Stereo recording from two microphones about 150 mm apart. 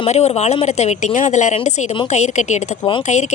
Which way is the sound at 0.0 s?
45° left (ahead or behind).